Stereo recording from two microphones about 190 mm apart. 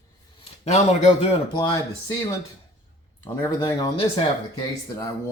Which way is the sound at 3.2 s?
20° left (ahead or behind).